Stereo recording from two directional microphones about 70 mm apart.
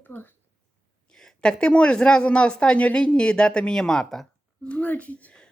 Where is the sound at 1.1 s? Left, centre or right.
Centre.